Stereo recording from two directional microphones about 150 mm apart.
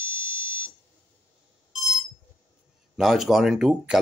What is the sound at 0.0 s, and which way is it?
Alarm clock, 15° right (ahead or behind).